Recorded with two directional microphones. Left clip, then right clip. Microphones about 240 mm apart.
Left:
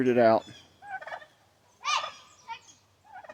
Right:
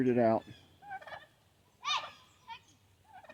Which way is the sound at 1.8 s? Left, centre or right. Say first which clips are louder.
Left 6 dB; left.